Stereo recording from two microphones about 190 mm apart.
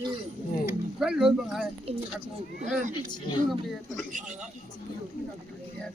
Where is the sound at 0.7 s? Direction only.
5° right (ahead or behind).